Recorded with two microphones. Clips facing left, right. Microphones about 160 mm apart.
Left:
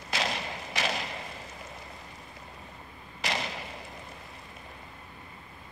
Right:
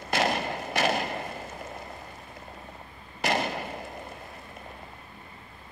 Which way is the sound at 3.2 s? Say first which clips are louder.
Right 6 dB; 55° right (ahead or behind).